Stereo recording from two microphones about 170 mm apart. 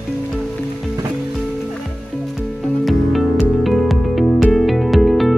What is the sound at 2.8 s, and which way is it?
Music, centre (ahead or behind).